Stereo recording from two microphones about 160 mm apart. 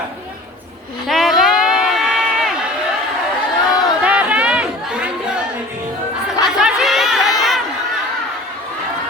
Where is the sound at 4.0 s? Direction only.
5° right (ahead or behind).